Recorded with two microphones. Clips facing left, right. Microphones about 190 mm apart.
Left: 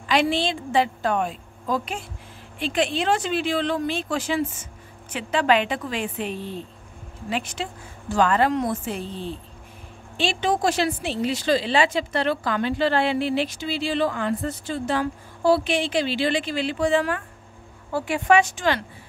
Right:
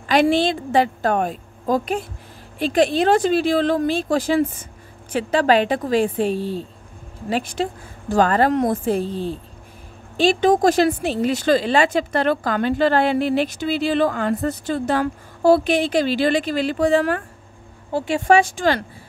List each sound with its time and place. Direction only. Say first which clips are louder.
0.0 s a woman's voice: right 5 dB; 45° right (ahead or behind)
17.9 s speech: right 3 dB; 25° right (ahead or behind)